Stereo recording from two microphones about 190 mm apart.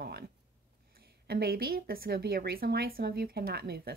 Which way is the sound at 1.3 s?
55° right (ahead or behind).